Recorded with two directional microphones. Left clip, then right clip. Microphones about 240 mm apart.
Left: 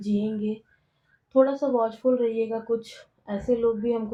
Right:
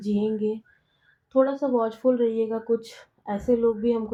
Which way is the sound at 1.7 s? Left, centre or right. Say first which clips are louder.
Even; right.